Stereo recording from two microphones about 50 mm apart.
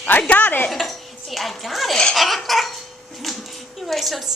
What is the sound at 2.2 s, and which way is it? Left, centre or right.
Laughter, centre.